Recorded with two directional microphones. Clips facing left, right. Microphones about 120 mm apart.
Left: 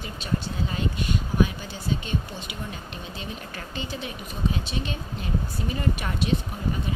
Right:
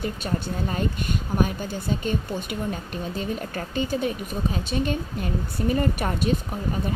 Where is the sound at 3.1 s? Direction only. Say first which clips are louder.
Right 9 dB; 45° right (ahead or behind).